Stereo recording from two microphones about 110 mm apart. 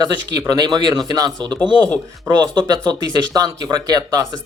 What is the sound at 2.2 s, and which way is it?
Speech, 35° right (ahead or behind).